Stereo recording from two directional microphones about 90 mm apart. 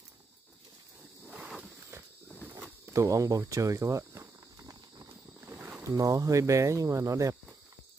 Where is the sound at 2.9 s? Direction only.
35° right (ahead or behind).